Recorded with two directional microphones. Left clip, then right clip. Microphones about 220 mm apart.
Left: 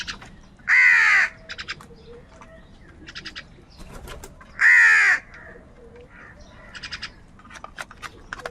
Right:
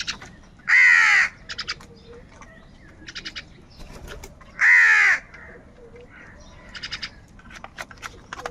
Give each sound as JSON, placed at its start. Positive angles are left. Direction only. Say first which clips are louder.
{"t": 0.6, "sound": "crow", "louder": "right 1 dB", "side_deg": -5}
{"t": 1.5, "sound": "crow", "louder": "right 2 dB", "side_deg": -20}
{"t": 3.1, "sound": "bird", "louder": "right 2 dB", "side_deg": -10}
{"t": 4.5, "sound": "crow", "louder": "left 1 dB", "side_deg": 0}
{"t": 6.7, "sound": "bird", "louder": "right 2 dB", "side_deg": -5}
{"t": 7.6, "sound": "horse", "louder": "even", "side_deg": 0}